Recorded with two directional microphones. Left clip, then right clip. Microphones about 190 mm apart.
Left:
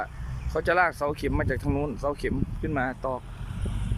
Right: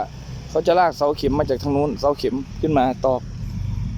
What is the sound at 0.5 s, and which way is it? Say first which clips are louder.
Speech: right 7 dB; 15° right (ahead or behind).